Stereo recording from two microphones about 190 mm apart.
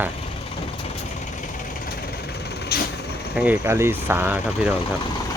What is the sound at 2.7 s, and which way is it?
Vehicle, 55° left (ahead or behind).